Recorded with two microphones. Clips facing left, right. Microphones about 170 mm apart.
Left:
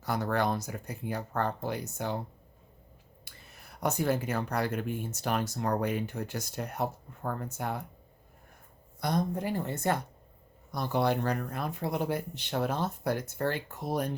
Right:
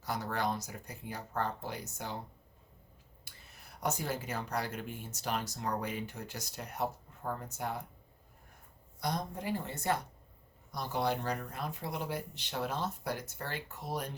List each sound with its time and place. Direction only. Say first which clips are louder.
0.0 s speech: left 6 dB; 55° left (ahead or behind)
3.3 s a sound: left 4 dB; 60° left (ahead or behind)
3.8 s speech: left 7 dB; 55° left (ahead or behind)
9.0 s speech: left 6 dB; 55° left (ahead or behind)